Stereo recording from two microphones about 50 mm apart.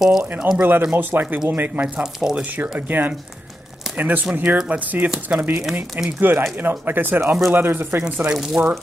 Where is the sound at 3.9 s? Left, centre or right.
Right.